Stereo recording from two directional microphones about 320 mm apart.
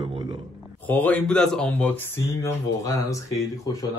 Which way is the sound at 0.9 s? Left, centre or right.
Centre.